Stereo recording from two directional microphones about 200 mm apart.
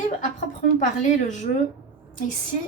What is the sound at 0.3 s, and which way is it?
A woman's voice, 35° left (ahead or behind).